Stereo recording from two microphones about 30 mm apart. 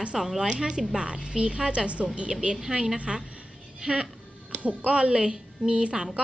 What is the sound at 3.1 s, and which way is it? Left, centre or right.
Speech, centre.